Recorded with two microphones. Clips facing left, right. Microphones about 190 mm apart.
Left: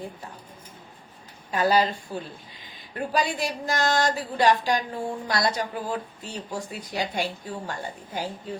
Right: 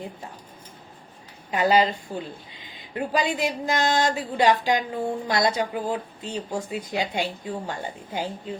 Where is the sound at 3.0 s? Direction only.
20° right (ahead or behind).